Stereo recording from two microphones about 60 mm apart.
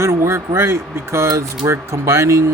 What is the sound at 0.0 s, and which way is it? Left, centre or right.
Speech, right.